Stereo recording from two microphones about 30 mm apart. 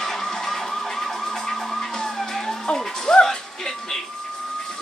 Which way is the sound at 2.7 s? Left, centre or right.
Centre.